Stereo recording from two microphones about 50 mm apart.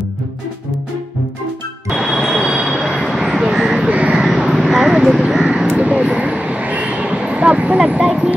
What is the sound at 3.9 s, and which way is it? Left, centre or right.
Vehicle, right.